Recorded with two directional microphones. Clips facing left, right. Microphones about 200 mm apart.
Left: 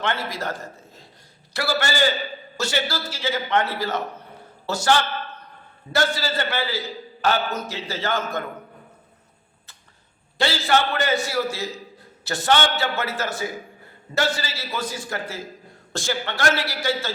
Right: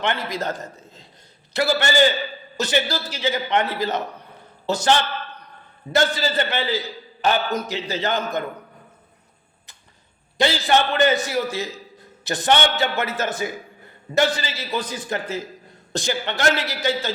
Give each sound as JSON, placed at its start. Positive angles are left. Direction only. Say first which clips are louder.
{"t": 0.0, "sound": "a man's voice", "louder": "right 2 dB", "side_deg": -20}
{"t": 10.3, "sound": "a man's voice", "louder": "right 2 dB", "side_deg": -15}